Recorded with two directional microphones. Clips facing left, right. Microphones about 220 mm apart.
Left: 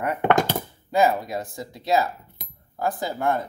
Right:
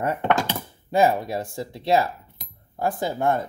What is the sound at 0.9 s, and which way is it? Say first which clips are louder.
Speech: right 1 dB; 30° right (ahead or behind).